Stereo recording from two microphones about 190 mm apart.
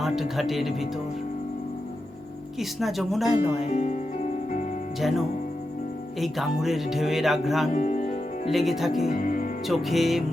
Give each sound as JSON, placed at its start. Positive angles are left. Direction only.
{"t": 0.0, "sound": "speech", "side_deg": 0}
{"t": 2.6, "sound": "speech", "side_deg": 0}
{"t": 3.7, "sound": "music", "side_deg": 35}
{"t": 4.9, "sound": "speech", "side_deg": 0}
{"t": 7.7, "sound": "speech", "side_deg": 40}
{"t": 8.4, "sound": "speech", "side_deg": 0}
{"t": 9.1, "sound": "music", "side_deg": 45}
{"t": 9.6, "sound": "speech", "side_deg": 0}